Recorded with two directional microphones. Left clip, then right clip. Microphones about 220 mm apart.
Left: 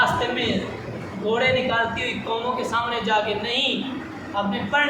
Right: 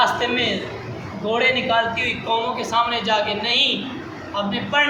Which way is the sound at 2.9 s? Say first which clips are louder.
Right 2 dB; 15° left (ahead or behind).